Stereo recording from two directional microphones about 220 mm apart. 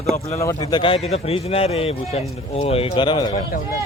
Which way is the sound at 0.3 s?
15° left (ahead or behind).